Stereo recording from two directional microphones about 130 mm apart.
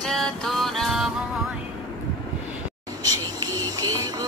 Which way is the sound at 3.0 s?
30° right (ahead or behind).